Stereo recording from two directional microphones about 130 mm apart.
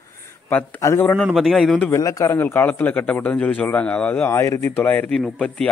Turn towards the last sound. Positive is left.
turn(degrees=10)  # may be behind; listen again after turning